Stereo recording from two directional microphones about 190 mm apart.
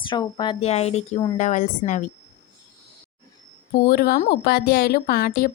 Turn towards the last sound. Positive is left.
turn(degrees=50)  # may be behind; listen again after turning